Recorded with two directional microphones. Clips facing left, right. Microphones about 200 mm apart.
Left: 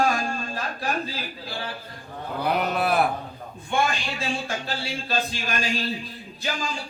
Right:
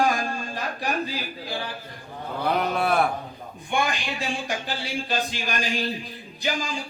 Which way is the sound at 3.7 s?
15° right (ahead or behind).